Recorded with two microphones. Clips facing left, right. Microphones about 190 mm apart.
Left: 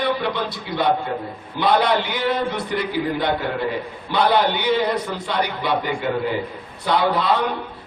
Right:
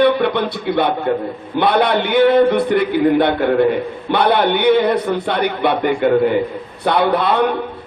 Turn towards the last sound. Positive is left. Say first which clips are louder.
# right 5 dB
turn(degrees=-60)  # may be behind; listen again after turning